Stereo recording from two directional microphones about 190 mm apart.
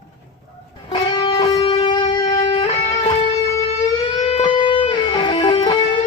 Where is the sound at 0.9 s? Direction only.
20° left (ahead or behind).